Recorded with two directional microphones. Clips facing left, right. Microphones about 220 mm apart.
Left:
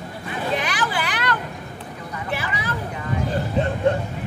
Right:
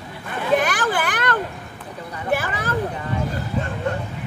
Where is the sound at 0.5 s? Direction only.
50° right (ahead or behind).